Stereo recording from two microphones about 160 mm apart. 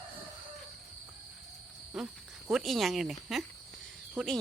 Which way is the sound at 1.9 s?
5° right (ahead or behind).